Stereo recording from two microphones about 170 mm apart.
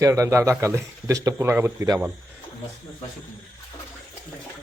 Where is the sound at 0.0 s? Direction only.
20° right (ahead or behind).